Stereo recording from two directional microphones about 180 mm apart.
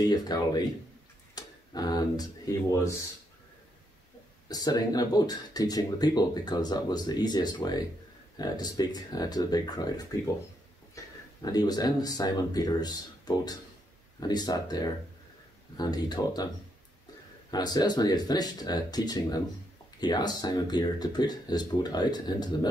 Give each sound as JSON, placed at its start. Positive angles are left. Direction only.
{"t": 0.0, "sound": "speech", "side_deg": 20}
{"t": 4.5, "sound": "speech", "side_deg": 20}
{"t": 11.0, "sound": "a sound", "side_deg": 15}
{"t": 11.4, "sound": "speech", "side_deg": 20}
{"t": 17.5, "sound": "speech", "side_deg": 20}